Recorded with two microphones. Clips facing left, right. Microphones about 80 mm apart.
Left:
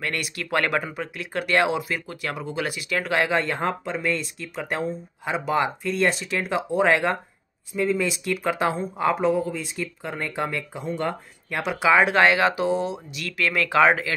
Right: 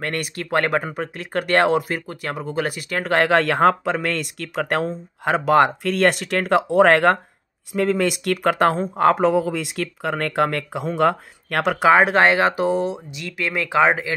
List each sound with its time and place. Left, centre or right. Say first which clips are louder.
0.0 s speech: right 3 dB; right
3.3 s speech: right 8 dB; right